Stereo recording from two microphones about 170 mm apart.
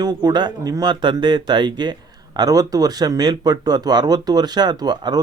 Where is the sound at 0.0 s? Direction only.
25° right (ahead or behind).